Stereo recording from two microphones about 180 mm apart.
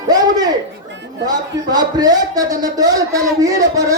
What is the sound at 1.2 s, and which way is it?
A man's voice, 20° right (ahead or behind).